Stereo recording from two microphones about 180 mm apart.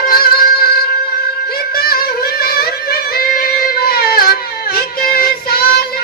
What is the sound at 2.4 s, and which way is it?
Music, 55° left (ahead or behind).